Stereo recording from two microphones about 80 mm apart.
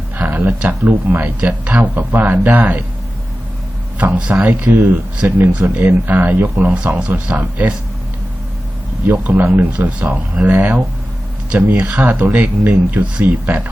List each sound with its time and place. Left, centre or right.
0.2 s speech: centre
3.9 s speech: centre
6.7 s speech: centre
9.0 s speech: right